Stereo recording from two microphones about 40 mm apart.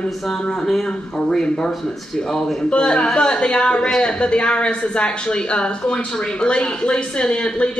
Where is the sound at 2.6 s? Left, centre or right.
Left.